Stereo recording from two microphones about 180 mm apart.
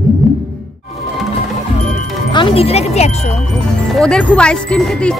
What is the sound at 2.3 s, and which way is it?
Speech, 30° left (ahead or behind).